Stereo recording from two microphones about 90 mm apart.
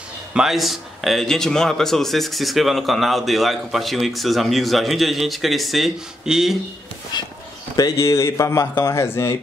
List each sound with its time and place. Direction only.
0.3 s speech: 5° right (ahead or behind)
7.1 s speech: 55° left (ahead or behind)
7.7 s speech: 40° left (ahead or behind)